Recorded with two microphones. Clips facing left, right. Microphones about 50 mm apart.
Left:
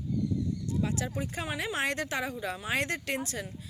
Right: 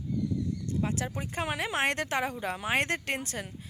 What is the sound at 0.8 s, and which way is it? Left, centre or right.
Speech, right.